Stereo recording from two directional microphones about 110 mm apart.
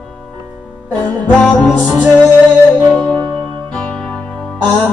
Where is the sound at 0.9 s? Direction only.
15° left (ahead or behind).